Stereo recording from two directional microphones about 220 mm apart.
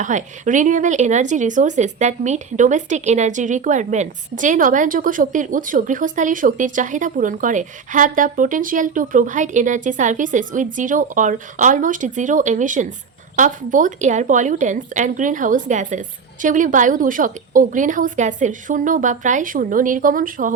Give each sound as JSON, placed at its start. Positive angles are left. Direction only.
{"t": 0.0, "sound": "speech", "side_deg": -35}